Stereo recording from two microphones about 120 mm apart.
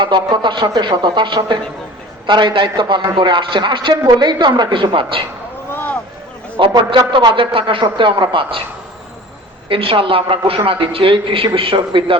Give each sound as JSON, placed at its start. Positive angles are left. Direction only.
{"t": 0.0, "sound": "a man's voice", "side_deg": -40}
{"t": 5.7, "sound": "a sound", "side_deg": 15}
{"t": 6.6, "sound": "a man's voice", "side_deg": -40}
{"t": 9.6, "sound": "a man's voice", "side_deg": -50}